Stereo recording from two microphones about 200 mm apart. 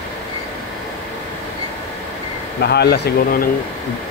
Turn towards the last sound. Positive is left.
turn(degrees=50)  # may be behind; listen again after turning